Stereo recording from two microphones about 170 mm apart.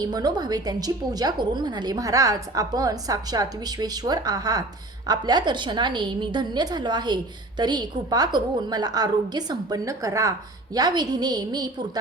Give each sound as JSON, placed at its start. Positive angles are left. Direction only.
{"t": 0.0, "sound": "a woman's voice", "side_deg": -25}